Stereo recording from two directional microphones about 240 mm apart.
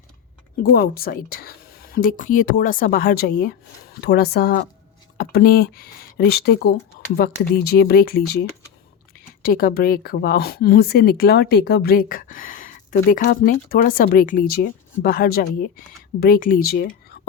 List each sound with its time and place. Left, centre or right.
0.6 s speech: left